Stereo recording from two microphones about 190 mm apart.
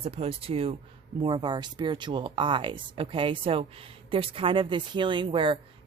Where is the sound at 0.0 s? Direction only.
30° right (ahead or behind).